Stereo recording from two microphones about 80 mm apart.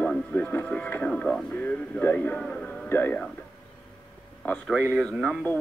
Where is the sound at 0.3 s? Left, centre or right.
Left.